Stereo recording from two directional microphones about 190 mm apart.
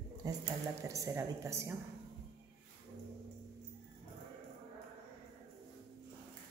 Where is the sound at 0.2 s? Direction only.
20° right (ahead or behind).